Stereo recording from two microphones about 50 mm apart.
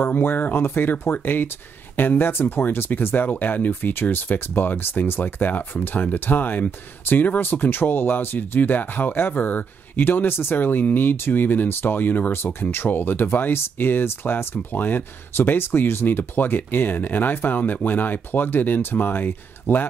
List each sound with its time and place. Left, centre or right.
0.0 s speech: left
12.7 s speech: left